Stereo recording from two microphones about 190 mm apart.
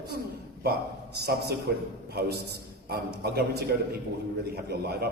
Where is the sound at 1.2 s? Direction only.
60° right (ahead or behind).